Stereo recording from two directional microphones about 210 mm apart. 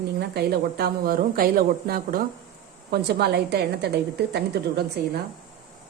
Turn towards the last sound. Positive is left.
turn(degrees=-50)  # may be behind; listen again after turning